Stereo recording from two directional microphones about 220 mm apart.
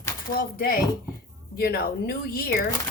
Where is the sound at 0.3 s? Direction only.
40° left (ahead or behind).